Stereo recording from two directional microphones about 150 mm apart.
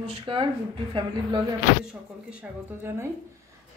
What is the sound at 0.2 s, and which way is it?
Speech, 35° right (ahead or behind).